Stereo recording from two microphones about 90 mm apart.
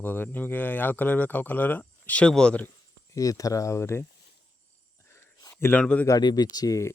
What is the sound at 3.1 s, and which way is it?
Speech, 40° left (ahead or behind).